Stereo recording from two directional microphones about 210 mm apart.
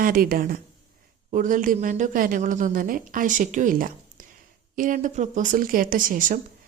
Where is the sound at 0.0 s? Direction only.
45° right (ahead or behind).